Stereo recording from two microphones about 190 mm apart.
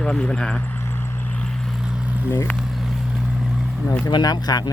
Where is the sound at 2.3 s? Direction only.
15° left (ahead or behind).